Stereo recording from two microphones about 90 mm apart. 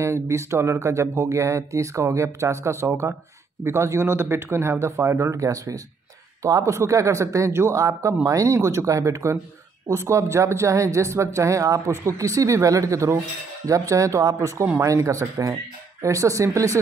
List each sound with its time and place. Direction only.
0.0 s speech: 30° right (ahead or behind)